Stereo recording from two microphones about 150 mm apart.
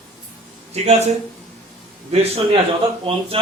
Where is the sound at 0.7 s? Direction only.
45° right (ahead or behind).